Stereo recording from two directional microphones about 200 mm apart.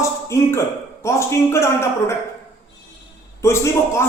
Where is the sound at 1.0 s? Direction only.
15° left (ahead or behind).